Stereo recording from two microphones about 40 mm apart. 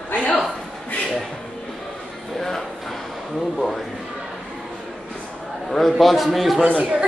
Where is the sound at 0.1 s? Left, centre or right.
Left.